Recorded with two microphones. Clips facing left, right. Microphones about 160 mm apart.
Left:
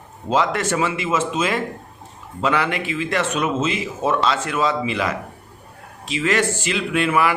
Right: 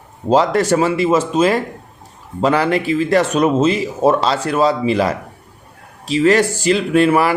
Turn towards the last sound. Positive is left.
turn(degrees=-35)  # may be behind; listen again after turning